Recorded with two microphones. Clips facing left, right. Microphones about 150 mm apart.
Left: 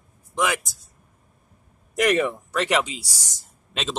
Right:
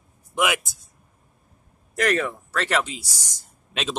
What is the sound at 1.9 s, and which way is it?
Speech, 5° left (ahead or behind).